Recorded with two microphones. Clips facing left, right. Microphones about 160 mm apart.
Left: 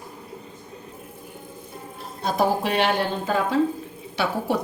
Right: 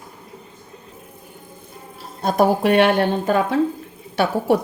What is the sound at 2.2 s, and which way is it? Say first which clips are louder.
A woman's voice: right 6 dB; 55° right (ahead or behind).